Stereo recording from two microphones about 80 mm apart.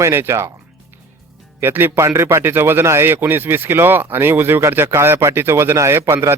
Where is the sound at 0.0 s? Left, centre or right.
Right.